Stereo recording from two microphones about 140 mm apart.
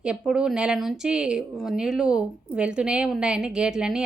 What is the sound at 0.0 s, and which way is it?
A woman's voice, 5° right (ahead or behind).